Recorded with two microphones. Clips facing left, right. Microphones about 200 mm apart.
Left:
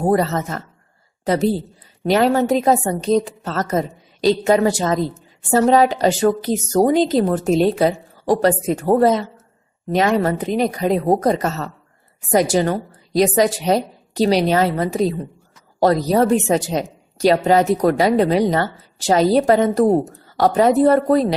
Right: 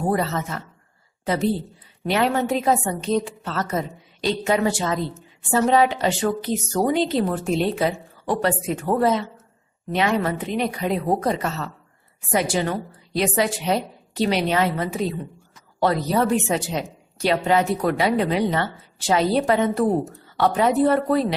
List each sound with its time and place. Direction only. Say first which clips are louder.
0.0 s a woman's voice: left 5 dB; 40° left (ahead or behind)